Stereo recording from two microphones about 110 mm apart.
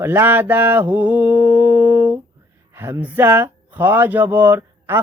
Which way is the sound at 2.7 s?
20° right (ahead or behind).